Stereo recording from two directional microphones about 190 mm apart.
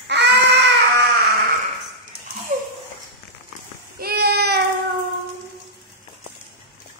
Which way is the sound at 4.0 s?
55° right (ahead or behind).